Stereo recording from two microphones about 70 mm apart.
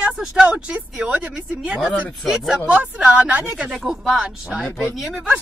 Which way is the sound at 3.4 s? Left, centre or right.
Centre.